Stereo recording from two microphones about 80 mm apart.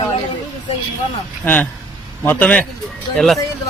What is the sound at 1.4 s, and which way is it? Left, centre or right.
A man's voice, left.